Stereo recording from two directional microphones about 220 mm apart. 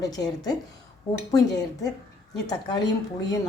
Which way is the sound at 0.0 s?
15° left (ahead or behind).